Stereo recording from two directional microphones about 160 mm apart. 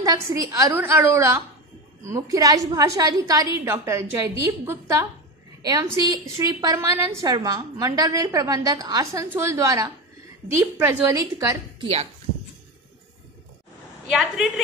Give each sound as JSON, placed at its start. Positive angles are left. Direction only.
{"t": 0.0, "sound": "a woman's voice", "side_deg": -20}
{"t": 11.8, "sound": "speech", "side_deg": -40}
{"t": 14.1, "sound": "a woman's voice", "side_deg": 0}